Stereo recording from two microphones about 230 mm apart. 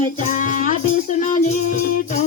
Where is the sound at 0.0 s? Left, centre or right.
Left.